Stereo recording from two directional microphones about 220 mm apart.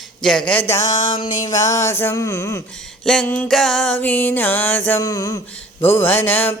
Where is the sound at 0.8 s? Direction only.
35° left (ahead or behind).